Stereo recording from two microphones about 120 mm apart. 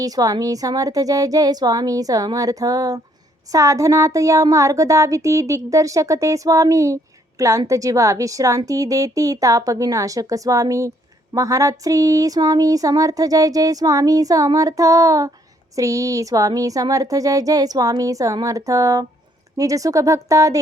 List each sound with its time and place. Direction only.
0.0 s speech: 30° right (ahead or behind)